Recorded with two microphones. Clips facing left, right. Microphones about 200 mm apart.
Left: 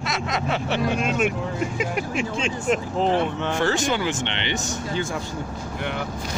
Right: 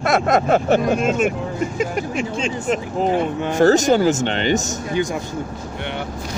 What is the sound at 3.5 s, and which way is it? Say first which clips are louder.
Speech: right 13 dB; 40° right (ahead or behind).